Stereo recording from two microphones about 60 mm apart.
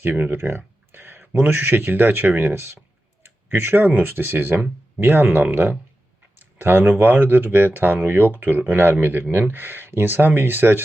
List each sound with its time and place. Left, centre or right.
0.0 s speech: right
3.2 s clicking: right
3.8 s speech: right
4.1 s speech: right
6.3 s a sound: right
7.0 s speech: right